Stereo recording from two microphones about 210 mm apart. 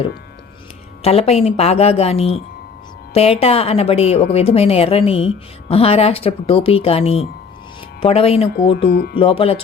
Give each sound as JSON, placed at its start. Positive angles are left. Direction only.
{"t": 1.0, "sound": "a woman's voice", "side_deg": 30}
{"t": 8.9, "sound": "speech", "side_deg": 50}
{"t": 9.1, "sound": "a woman's voice", "side_deg": 25}